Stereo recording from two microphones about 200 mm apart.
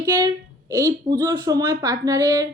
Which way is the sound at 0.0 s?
20° right (ahead or behind).